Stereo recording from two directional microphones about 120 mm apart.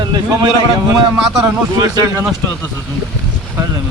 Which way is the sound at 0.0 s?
40° right (ahead or behind).